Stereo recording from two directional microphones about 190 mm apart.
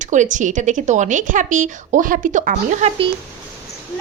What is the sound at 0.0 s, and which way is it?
Speech, 40° right (ahead or behind).